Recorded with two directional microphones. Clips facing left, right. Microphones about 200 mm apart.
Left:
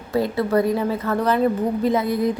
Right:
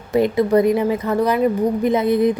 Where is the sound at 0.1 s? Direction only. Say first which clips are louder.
Right 4 dB; 20° right (ahead or behind).